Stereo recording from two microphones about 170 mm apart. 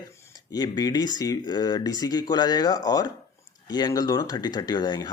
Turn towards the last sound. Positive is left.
turn(degrees=25)  # may be behind; listen again after turning